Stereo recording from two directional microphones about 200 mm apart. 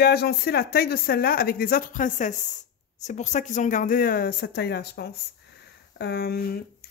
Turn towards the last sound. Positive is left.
turn(degrees=50)  # may be behind; listen again after turning